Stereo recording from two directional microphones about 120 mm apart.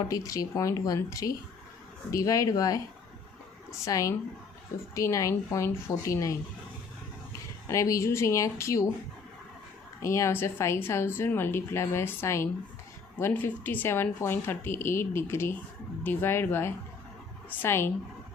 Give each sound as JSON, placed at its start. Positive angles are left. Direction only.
{"t": 0.1, "sound": "speech", "side_deg": 30}
{"t": 7.7, "sound": "speech", "side_deg": 25}
{"t": 10.0, "sound": "speech", "side_deg": 25}